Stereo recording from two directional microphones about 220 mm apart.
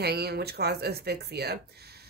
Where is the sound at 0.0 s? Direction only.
45° right (ahead or behind).